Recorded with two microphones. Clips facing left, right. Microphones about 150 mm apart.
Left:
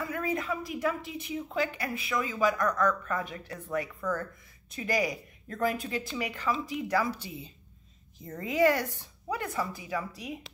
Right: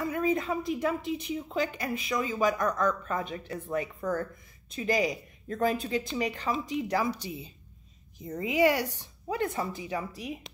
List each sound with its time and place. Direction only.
0.0 s a woman's voice: 25° right (ahead or behind)
9.3 s a woman's voice: 25° right (ahead or behind)